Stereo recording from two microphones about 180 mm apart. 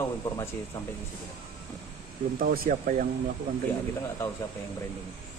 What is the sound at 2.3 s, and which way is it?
Speech, 55° right (ahead or behind).